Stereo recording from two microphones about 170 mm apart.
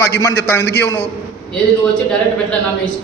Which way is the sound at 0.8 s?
15° left (ahead or behind).